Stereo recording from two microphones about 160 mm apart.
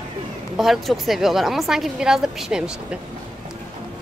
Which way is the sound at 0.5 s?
Centre (ahead or behind).